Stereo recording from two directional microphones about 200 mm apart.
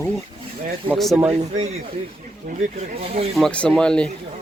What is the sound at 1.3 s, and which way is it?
Speech, 30° right (ahead or behind).